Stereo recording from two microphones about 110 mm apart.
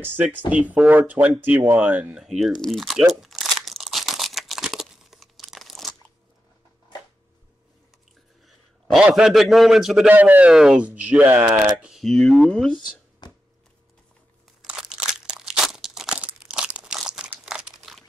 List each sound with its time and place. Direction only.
0.0 s speech: 20° right (ahead or behind)
2.2 s crumpling: centre (ahead or behind)
8.9 s a man's voice: 5° right (ahead or behind)
10.0 s speech: 15° right (ahead or behind)
11.9 s a man's voice: 5° left (ahead or behind)
13.2 s a sound: 40° left (ahead or behind)
14.6 s crunch: 5° right (ahead or behind)
17.5 s crumpling: 5° right (ahead or behind)